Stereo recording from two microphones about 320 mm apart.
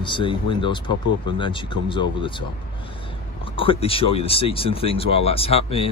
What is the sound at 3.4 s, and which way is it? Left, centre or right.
Speech, centre.